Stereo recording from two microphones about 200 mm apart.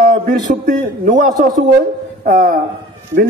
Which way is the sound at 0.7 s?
40° right (ahead or behind).